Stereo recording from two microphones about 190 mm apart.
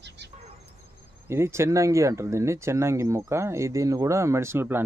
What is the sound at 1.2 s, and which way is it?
Speech, 15° right (ahead or behind).